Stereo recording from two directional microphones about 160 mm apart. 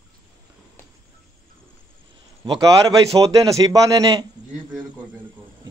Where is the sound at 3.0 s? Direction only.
20° right (ahead or behind).